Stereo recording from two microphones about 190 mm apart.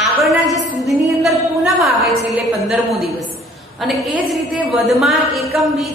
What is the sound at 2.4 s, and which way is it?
Speech, centre (ahead or behind).